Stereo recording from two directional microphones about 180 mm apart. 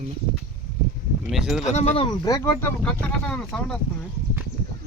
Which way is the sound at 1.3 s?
Centre (ahead or behind).